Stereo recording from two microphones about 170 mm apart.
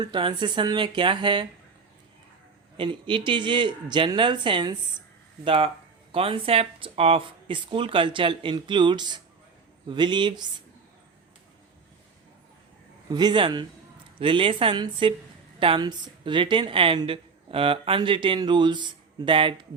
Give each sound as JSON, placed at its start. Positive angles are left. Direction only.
{"t": 0.0, "sound": "a woman's voice", "side_deg": -25}
{"t": 2.7, "sound": "a woman's voice", "side_deg": -30}
{"t": 13.1, "sound": "a woman's voice", "side_deg": -25}